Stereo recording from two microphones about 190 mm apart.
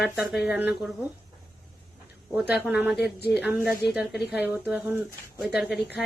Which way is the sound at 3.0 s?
60° left (ahead or behind).